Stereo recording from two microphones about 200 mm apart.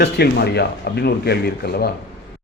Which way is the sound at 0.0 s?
55° left (ahead or behind).